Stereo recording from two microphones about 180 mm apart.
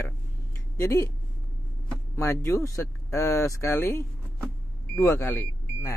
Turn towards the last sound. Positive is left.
turn(degrees=15)  # may be behind; listen again after turning